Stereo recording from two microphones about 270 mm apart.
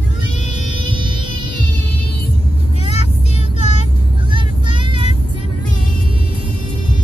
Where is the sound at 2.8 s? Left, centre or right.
Left.